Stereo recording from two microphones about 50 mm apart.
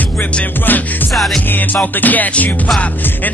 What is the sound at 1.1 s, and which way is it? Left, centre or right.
Music, centre.